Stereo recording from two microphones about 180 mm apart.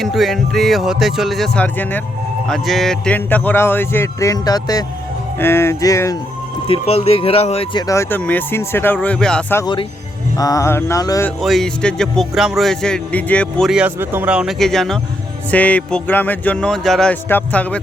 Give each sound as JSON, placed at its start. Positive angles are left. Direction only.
{"t": 0.0, "sound": "a man's voice", "side_deg": 0}
{"t": 6.7, "sound": "speech", "side_deg": 35}
{"t": 10.3, "sound": "speech", "side_deg": 20}
{"t": 11.4, "sound": "a man's voice", "side_deg": 0}